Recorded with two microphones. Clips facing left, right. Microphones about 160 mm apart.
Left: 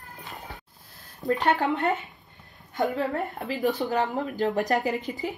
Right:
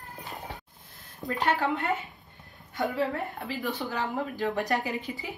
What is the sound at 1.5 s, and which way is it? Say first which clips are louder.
Speech: left 4 dB; 40° left (ahead or behind).